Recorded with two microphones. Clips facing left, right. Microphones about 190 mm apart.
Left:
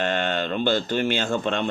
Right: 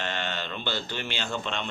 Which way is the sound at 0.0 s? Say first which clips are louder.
Left 8 dB; 50° left (ahead or behind).